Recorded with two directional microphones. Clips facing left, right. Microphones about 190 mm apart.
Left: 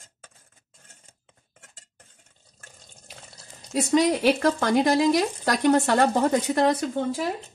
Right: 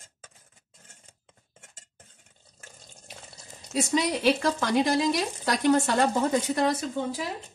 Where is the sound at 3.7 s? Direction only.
50° left (ahead or behind).